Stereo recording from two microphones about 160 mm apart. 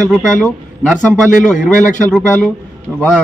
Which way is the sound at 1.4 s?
55° left (ahead or behind).